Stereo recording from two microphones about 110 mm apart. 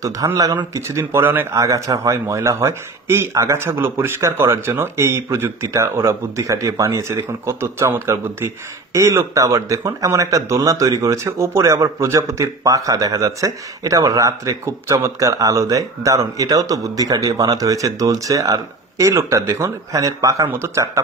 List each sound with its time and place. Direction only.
0.0 s a man's voice: 30° right (ahead or behind)